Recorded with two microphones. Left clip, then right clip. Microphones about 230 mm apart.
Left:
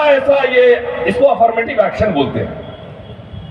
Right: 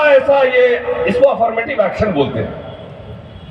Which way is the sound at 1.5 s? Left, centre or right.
Left.